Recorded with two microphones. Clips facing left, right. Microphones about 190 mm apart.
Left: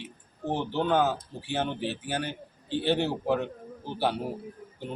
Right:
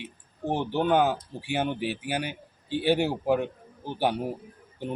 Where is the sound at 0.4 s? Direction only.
15° right (ahead or behind).